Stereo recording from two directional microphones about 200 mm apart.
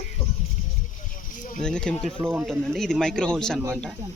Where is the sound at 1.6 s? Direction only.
5° left (ahead or behind).